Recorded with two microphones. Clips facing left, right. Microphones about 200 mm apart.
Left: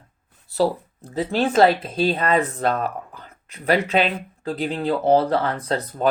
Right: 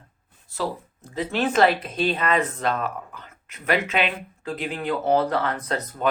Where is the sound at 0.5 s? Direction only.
35° left (ahead or behind).